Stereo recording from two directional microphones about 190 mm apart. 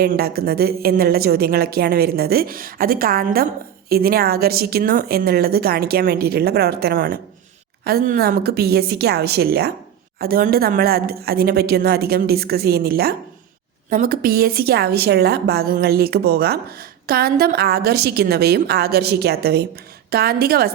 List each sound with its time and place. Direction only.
0.0 s a woman's voice: 55° right (ahead or behind)